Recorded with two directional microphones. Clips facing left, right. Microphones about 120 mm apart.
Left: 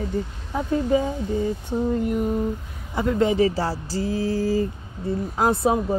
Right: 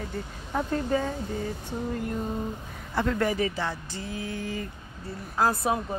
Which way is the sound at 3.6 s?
35° left (ahead or behind).